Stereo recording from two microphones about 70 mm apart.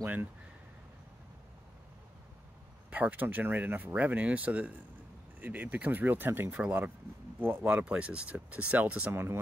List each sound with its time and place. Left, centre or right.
0.0 s speech: right
2.9 s speech: right
7.6 s speech: centre
9.1 s speech: right